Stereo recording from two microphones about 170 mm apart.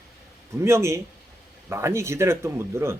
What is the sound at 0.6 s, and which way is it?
Speech, 15° right (ahead or behind).